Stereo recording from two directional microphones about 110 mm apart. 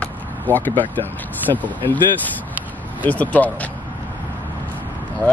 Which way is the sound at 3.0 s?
15° left (ahead or behind).